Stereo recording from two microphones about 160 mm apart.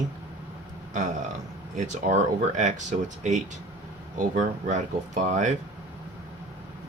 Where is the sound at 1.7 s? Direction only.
50° right (ahead or behind).